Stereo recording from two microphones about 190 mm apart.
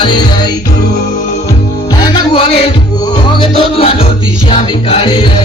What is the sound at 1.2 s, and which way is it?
Music, 40° left (ahead or behind).